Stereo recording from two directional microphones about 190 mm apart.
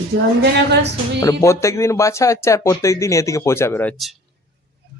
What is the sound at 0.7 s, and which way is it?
Speech, 60° right (ahead or behind).